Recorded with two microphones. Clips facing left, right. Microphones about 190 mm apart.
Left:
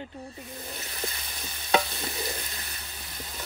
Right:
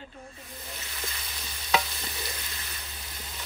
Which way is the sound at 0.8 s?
35° left (ahead or behind).